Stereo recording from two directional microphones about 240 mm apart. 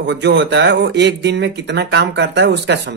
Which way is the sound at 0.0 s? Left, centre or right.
Right.